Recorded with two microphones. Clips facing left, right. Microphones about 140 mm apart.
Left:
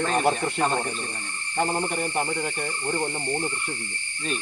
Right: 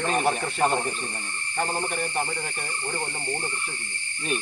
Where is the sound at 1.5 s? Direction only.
20° left (ahead or behind).